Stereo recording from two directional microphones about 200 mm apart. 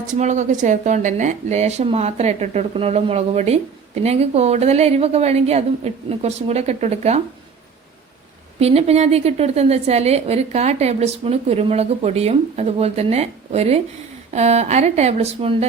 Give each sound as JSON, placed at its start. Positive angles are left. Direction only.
{"t": 0.1, "sound": "speech", "side_deg": -35}
{"t": 8.5, "sound": "speech", "side_deg": -30}